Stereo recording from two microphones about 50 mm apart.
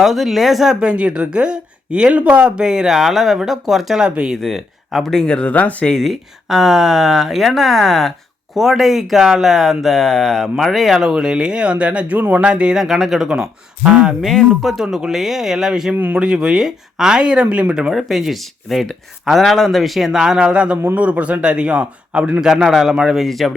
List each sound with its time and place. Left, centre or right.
0.0 s a woman's voice: centre
4.4 s speech: centre
5.1 s speech: centre
5.9 s speech: centre
11.1 s speech: centre
12.7 s a woman's voice: centre
18.1 s speech: centre; by 22.3 s right
22.4 s a woman's voice: centre
23.2 s speech: centre